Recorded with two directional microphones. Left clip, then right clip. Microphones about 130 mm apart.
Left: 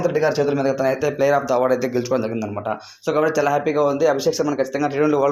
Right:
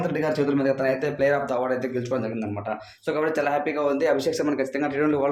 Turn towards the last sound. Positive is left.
turn(degrees=35)  # may be behind; listen again after turning